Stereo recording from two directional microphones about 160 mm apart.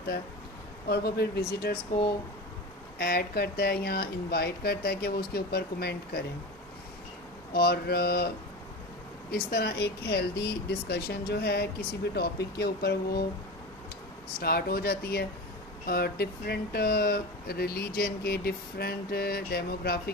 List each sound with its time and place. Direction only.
0.9 s speech: 85° left
3.0 s speech: 70° left (ahead or behind)
7.5 s speech: 75° left (ahead or behind)
9.3 s speech: 80° left
14.3 s speech: 70° left (ahead or behind)